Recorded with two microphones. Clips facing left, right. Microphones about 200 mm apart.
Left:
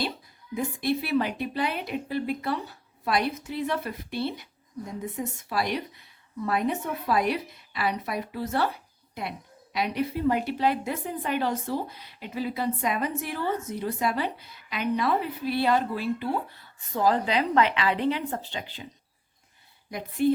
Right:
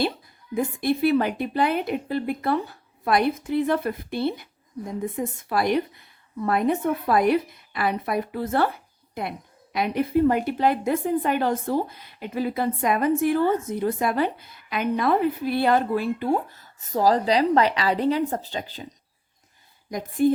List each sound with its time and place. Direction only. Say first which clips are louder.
0.5 s a woman's voice: right 4 dB; 50° right (ahead or behind)
9.7 s a woman's voice: right 6 dB; 50° right (ahead or behind)
19.9 s a woman's voice: right 3 dB; 45° right (ahead or behind)